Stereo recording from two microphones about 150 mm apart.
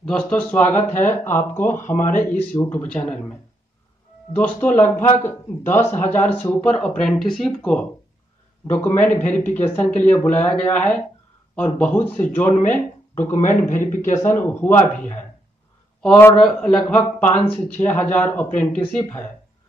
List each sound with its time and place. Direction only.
0.0 s speech: 5° left (ahead or behind)
4.4 s speech: 10° left (ahead or behind)
13.3 s a man's voice: 60° left (ahead or behind)
14.1 s a man's voice: 15° left (ahead or behind)